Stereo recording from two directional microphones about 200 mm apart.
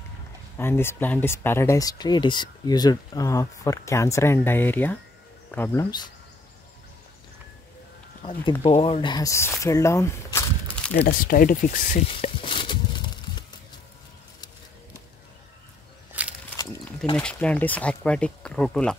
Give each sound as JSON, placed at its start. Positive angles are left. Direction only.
{"t": 0.6, "sound": "speech", "side_deg": 10}
{"t": 8.6, "sound": "speech", "side_deg": 30}
{"t": 10.9, "sound": "speech", "side_deg": 45}
{"t": 12.1, "sound": "speech", "side_deg": 25}
{"t": 16.1, "sound": "a sound", "side_deg": -5}
{"t": 17.2, "sound": "speech", "side_deg": 5}